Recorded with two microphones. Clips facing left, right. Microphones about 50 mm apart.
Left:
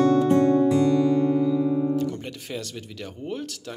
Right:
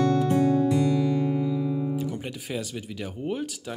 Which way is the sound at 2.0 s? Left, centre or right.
Centre.